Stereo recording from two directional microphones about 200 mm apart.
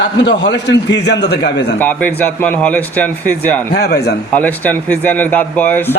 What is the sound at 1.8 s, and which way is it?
Speech, 10° left (ahead or behind).